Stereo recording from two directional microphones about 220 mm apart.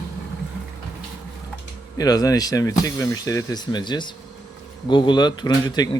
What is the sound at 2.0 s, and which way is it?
Speech, 15° left (ahead or behind).